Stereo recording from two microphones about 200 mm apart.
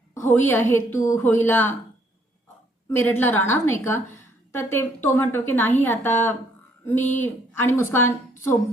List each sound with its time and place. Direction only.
0.1 s a woman's voice: 10° left (ahead or behind)
2.9 s a woman's voice: 10° left (ahead or behind)